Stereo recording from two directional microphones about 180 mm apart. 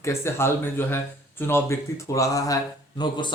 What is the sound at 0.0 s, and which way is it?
Speech, 15° left (ahead or behind).